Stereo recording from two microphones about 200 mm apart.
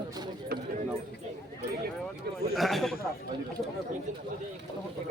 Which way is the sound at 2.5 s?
Centre (ahead or behind).